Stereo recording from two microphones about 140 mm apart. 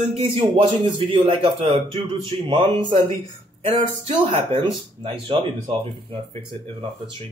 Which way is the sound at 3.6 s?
45° right (ahead or behind).